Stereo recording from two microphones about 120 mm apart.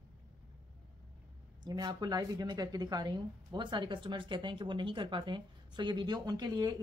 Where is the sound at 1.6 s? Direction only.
35° right (ahead or behind).